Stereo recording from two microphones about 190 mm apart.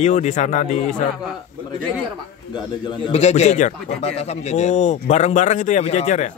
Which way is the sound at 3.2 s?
35° left (ahead or behind).